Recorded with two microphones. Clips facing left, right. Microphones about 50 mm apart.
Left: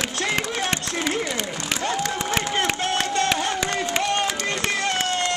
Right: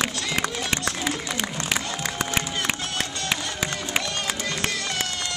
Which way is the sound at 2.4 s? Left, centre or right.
Left.